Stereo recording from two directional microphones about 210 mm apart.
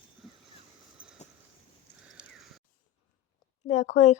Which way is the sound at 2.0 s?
5° right (ahead or behind).